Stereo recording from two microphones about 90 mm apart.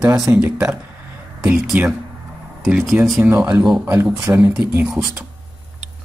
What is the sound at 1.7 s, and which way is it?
Speech, 10° right (ahead or behind).